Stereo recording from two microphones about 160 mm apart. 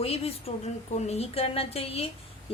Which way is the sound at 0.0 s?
40° left (ahead or behind).